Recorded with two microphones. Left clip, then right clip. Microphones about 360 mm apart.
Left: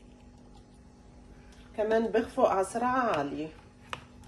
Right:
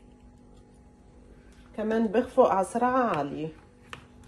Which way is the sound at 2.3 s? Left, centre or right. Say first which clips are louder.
Right 5 dB; centre.